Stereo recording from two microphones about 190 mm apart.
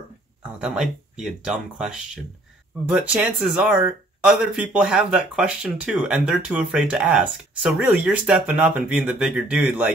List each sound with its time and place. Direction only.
0.6 s speech: 5° right (ahead or behind)
2.9 s speech: 5° right (ahead or behind)